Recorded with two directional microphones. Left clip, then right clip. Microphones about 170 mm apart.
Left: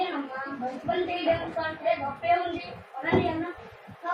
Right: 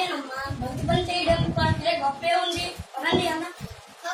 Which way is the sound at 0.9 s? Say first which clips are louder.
Right 3 dB; centre (ahead or behind).